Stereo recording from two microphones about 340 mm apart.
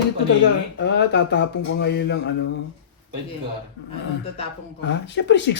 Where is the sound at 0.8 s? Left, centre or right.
Left.